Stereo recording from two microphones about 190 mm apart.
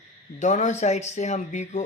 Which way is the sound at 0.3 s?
40° left (ahead or behind).